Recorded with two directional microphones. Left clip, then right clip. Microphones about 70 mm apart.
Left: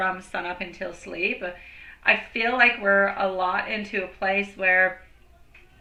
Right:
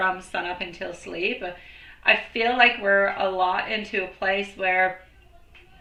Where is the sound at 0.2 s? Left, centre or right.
Left.